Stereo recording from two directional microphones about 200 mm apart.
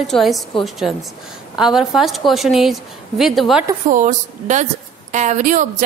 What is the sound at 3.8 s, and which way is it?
A woman's voice, 40° right (ahead or behind).